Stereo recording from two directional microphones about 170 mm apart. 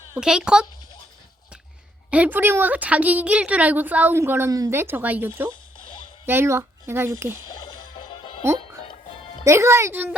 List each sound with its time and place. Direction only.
0.1 s a child's voice: 5° right (ahead or behind)
2.0 s a woman's voice: 10° right (ahead or behind)
9.4 s a woman's voice: 15° right (ahead or behind)